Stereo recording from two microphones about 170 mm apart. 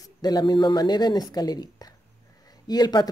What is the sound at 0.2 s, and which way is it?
Speech, 25° left (ahead or behind).